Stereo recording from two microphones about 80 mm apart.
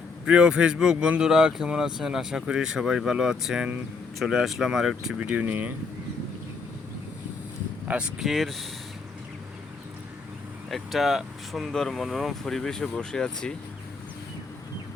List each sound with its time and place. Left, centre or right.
0.3 s speech: centre
5.2 s speech: right
7.9 s speech: centre
8.2 s speech: centre
10.7 s speech: centre